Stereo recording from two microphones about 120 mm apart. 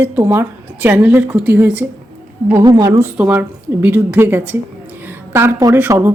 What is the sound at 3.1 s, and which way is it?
Speech, 15° right (ahead or behind).